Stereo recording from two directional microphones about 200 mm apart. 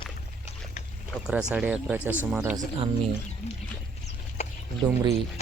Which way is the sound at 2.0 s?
10° left (ahead or behind).